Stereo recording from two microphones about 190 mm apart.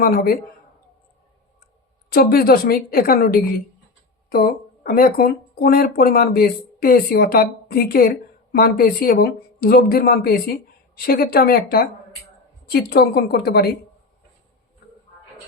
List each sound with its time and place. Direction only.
0.0 s speech: 50° left (ahead or behind)
2.0 s a woman's voice: 50° left (ahead or behind)